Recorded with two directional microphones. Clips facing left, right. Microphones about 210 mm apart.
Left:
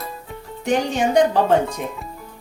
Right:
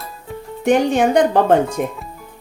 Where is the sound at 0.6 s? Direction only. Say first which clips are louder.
Right 5 dB; 55° right (ahead or behind).